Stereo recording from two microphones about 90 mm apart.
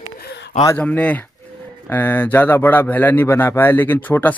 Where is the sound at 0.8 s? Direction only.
15° left (ahead or behind).